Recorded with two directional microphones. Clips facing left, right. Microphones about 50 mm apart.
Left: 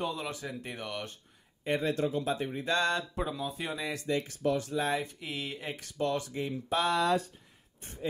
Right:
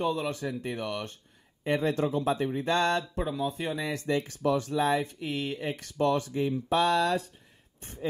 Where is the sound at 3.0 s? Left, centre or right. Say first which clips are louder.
Right 3 dB; centre.